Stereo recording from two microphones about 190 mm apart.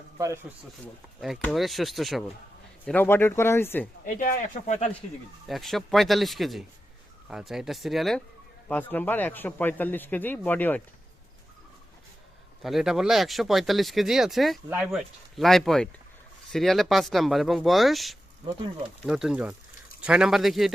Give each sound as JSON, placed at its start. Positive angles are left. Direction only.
{"t": 1.2, "sound": "speech", "side_deg": 0}
{"t": 4.0, "sound": "speech", "side_deg": 45}
{"t": 5.5, "sound": "speech", "side_deg": 0}
{"t": 12.6, "sound": "speech", "side_deg": 0}